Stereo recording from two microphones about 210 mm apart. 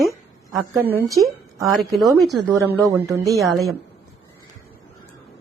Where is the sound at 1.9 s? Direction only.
Centre (ahead or behind).